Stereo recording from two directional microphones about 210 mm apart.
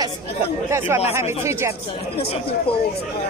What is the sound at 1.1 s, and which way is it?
Speech, 15° right (ahead or behind).